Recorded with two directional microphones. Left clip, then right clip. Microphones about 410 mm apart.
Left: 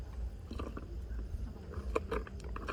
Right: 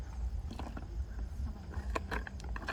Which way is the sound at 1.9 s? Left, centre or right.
Right.